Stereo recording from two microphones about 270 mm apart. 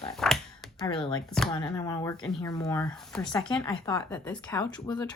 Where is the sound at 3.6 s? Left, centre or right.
Centre.